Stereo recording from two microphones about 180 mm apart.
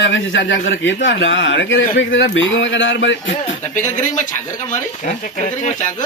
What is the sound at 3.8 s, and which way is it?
Speech, 45° left (ahead or behind).